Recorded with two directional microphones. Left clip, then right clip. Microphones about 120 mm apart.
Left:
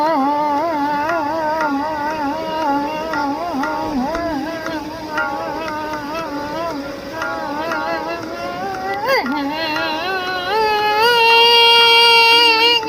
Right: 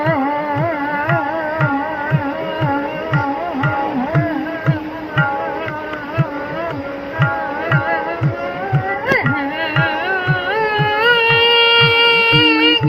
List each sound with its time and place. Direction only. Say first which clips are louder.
9.0 s carnatic music: right 1 dB; 20° left (ahead or behind)